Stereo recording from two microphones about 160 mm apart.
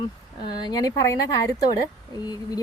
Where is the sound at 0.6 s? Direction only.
25° left (ahead or behind).